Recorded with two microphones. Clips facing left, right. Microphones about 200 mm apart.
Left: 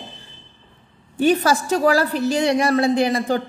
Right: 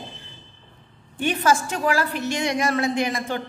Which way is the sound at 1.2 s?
35° left (ahead or behind).